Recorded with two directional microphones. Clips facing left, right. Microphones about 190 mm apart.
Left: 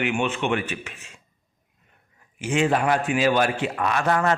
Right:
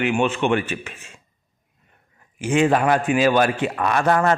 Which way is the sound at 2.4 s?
50° right (ahead or behind).